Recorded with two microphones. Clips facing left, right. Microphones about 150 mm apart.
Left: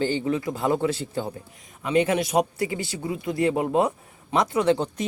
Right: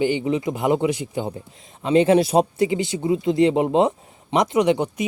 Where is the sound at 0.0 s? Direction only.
15° right (ahead or behind).